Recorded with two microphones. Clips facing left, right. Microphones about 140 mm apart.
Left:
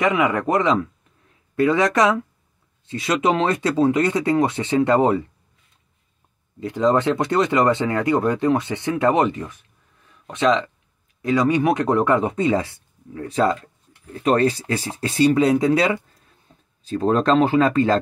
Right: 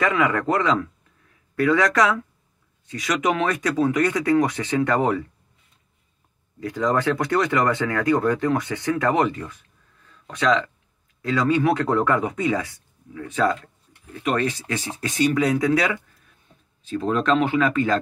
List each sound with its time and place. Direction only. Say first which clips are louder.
0.0 s speech: left 2 dB; 20° left (ahead or behind)
6.6 s speech: left 4 dB; 25° left (ahead or behind)
16.8 s speech: left 4 dB; 35° left (ahead or behind)